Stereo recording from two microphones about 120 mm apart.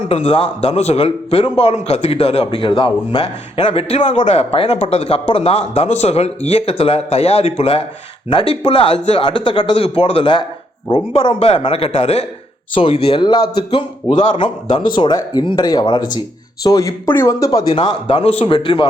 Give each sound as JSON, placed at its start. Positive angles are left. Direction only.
{"t": 0.1, "sound": "a man's voice", "side_deg": 55}
{"t": 11.3, "sound": "a man's voice", "side_deg": 60}
{"t": 17.7, "sound": "speech", "side_deg": 45}